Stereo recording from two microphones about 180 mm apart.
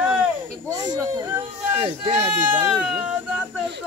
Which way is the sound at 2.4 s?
10° right (ahead or behind).